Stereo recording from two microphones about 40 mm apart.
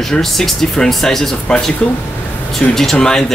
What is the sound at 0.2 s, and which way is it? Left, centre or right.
Speech, centre.